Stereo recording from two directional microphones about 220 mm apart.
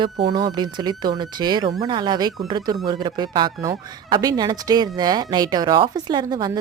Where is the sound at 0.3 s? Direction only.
20° right (ahead or behind).